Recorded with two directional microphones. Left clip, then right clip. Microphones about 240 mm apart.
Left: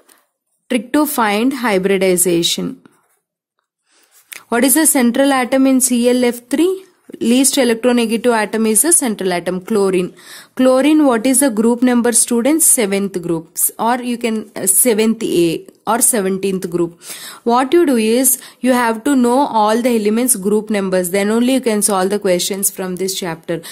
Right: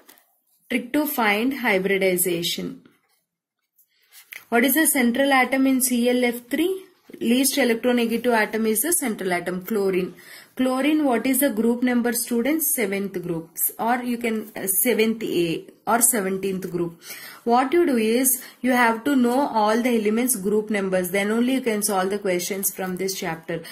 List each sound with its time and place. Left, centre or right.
0.7 s speech: left
4.3 s speech: left